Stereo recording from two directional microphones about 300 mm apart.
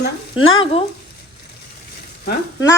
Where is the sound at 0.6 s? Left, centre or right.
Centre.